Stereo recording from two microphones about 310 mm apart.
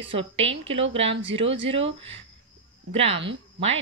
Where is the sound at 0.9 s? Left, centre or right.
Centre.